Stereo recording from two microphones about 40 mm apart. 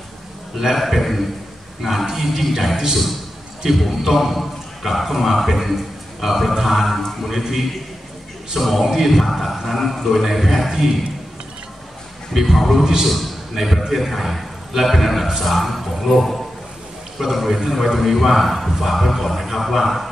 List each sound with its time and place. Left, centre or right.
0.6 s a man's voice: centre
12.4 s a man's voice: centre